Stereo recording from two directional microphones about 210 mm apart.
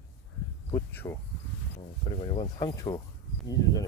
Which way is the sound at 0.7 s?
10° left (ahead or behind).